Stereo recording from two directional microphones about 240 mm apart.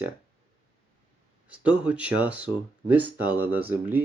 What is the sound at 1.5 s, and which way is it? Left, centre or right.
Speech, centre.